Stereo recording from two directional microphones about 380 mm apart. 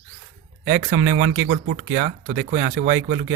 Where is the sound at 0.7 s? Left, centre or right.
Right.